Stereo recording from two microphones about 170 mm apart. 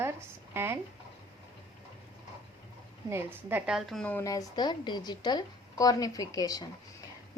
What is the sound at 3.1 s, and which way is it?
A woman's voice, 15° right (ahead or behind).